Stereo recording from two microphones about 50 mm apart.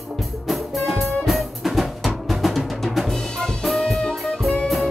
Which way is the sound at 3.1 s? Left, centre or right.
Centre.